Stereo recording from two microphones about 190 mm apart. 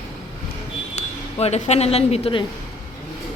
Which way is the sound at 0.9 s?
35° left (ahead or behind).